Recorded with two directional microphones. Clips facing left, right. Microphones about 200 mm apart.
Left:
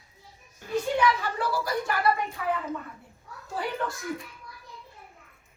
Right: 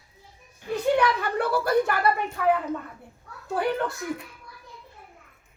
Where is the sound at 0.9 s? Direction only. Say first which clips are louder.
Right 2 dB; 60° right (ahead or behind).